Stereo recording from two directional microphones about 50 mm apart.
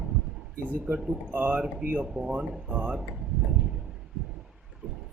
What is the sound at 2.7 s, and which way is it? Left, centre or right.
Speech, right.